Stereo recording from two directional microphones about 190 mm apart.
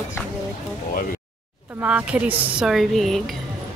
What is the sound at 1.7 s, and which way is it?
A woman's voice, 10° right (ahead or behind).